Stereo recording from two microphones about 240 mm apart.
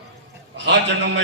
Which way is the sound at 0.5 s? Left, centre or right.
Right.